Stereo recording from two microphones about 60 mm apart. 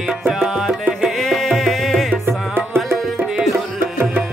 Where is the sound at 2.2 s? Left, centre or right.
Right.